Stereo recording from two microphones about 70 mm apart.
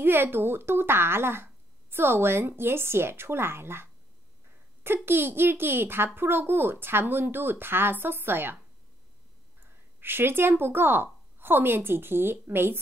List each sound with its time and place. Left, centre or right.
0.0 s speech: right
9.6 s speech: right